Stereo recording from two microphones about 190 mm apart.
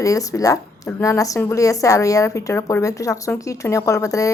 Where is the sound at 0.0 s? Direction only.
15° left (ahead or behind).